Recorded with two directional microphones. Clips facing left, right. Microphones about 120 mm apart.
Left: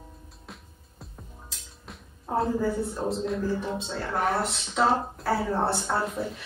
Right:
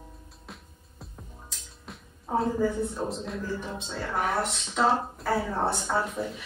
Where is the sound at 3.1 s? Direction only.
Centre (ahead or behind).